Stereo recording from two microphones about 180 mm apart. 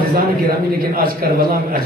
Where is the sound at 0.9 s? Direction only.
55° right (ahead or behind).